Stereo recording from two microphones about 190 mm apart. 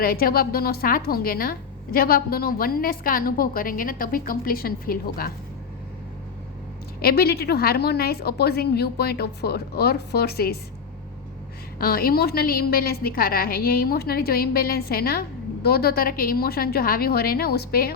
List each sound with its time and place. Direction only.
0.0 s a woman's voice: 50° left (ahead or behind)
7.0 s a woman's voice: 55° left (ahead or behind)
11.8 s a woman's voice: 50° left (ahead or behind)